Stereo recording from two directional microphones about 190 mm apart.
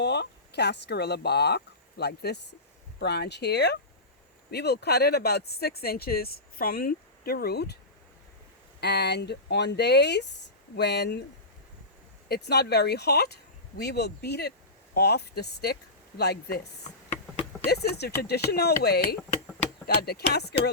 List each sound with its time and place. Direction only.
0.0 s speech: 60° left (ahead or behind)
8.8 s speech: 60° left (ahead or behind)
12.3 s speech: 60° left (ahead or behind)
17.7 s speech: 60° left (ahead or behind)